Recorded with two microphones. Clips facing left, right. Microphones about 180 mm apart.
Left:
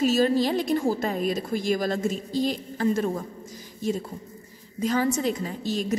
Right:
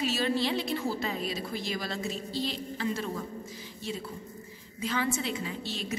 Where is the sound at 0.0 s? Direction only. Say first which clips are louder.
Left 8 dB; 45° left (ahead or behind).